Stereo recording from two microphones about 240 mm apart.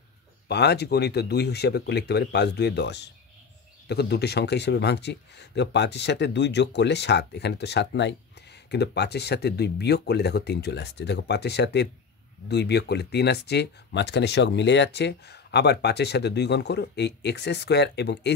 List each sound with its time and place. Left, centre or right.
0.5 s speech: left